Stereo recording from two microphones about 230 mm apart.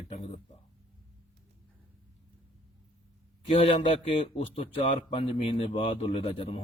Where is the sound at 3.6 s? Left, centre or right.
Left.